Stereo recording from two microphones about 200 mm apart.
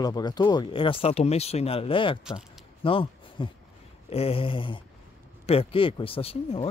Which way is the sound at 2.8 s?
25° left (ahead or behind).